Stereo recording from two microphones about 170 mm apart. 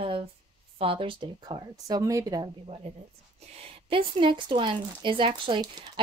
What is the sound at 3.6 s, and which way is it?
Speech, 35° right (ahead or behind).